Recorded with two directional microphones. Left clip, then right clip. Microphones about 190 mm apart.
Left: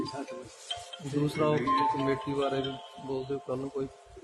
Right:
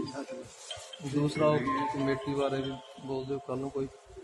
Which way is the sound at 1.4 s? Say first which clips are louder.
Left 1 dB; 10° right (ahead or behind).